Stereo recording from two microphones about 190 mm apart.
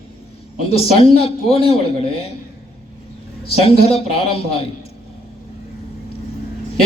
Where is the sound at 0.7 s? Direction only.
30° left (ahead or behind).